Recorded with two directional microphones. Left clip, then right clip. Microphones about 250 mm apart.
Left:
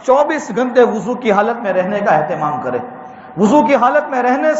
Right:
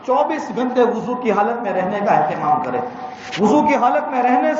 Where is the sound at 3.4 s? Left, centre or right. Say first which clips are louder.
Left 4 dB; left.